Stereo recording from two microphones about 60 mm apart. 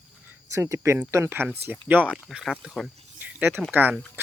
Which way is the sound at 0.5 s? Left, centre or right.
Right.